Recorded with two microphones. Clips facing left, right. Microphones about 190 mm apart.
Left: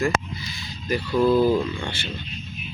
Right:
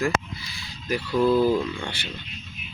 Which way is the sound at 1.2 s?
5° left (ahead or behind).